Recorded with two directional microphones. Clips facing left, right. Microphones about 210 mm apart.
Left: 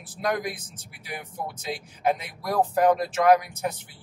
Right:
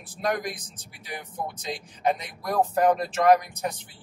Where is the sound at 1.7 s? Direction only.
10° left (ahead or behind).